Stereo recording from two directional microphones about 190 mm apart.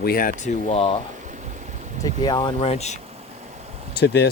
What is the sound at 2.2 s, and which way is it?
Speech, 25° left (ahead or behind).